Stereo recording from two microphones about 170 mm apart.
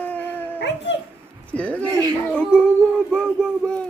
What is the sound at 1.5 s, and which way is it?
Speech, 10° left (ahead or behind).